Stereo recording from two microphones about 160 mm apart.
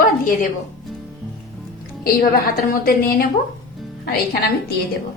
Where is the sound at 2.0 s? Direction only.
70° left (ahead or behind).